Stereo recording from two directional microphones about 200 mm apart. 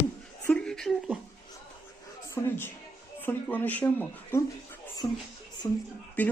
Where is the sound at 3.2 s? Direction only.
10° left (ahead or behind).